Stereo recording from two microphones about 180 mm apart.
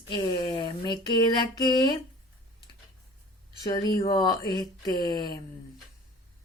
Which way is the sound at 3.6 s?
20° left (ahead or behind).